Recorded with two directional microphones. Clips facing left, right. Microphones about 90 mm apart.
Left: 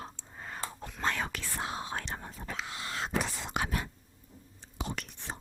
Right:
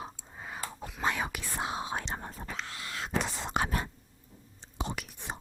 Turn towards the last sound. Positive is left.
turn(degrees=-10)  # may be behind; listen again after turning